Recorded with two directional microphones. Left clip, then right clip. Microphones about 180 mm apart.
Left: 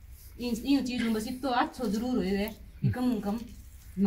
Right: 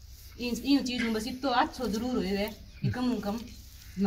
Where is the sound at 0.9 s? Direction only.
25° left (ahead or behind).